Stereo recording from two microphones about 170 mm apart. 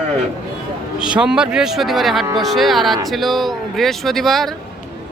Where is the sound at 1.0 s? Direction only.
5° right (ahead or behind).